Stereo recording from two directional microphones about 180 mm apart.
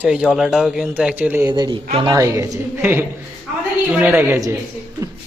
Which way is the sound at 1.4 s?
25° right (ahead or behind).